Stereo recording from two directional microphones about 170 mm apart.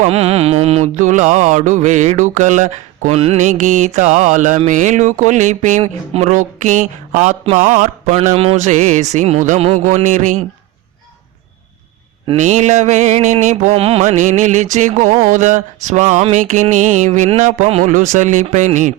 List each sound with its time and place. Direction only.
0.0 s mantra: 35° right (ahead or behind)
12.4 s mantra: 45° right (ahead or behind)